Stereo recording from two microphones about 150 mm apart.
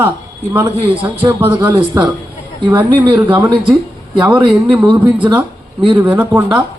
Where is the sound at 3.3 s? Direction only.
10° right (ahead or behind).